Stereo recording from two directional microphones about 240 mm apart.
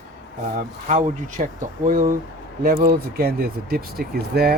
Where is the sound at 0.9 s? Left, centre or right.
Right.